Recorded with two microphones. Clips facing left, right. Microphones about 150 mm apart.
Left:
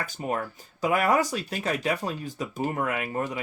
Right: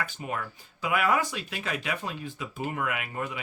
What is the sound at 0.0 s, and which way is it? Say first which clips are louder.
Speech: left 4 dB; 40° left (ahead or behind).